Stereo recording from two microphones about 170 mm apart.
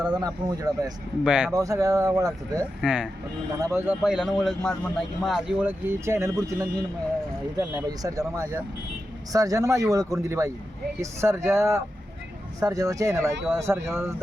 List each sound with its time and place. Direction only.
0.1 s speech: 20° right (ahead or behind)
1.2 s speech: 5° right (ahead or behind)
1.5 s speech: 20° right (ahead or behind)
2.8 s speech: 5° right (ahead or behind)
4.6 s a man's voice: 15° left (ahead or behind)
4.9 s speech: centre (ahead or behind)
7.9 s speech: 20° right (ahead or behind)